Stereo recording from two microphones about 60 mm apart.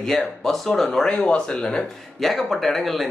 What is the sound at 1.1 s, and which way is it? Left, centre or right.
Speech, centre.